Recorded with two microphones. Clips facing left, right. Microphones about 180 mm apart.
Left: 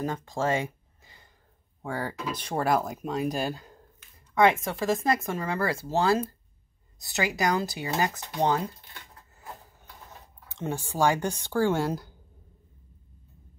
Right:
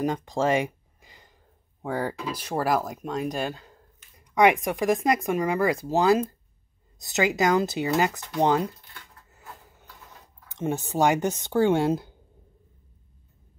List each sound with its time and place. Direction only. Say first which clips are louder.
0.0 s a sound: right 4 dB; 20° right (ahead or behind)
1.8 s speech: right 4 dB; 15° right (ahead or behind)
2.4 s speech: right 1 dB; centre (ahead or behind)
4.4 s speech: right 2 dB; 15° right (ahead or behind)
8.1 s speech: even; 20° left (ahead or behind)
8.9 s a sound: even; 25° left (ahead or behind)
10.5 s speech: right 5 dB; 20° right (ahead or behind)